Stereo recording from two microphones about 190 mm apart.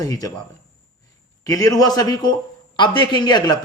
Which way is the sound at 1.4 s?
15° left (ahead or behind).